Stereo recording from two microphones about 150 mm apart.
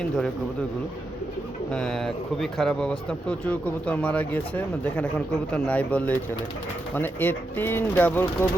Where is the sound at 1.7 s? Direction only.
5° left (ahead or behind).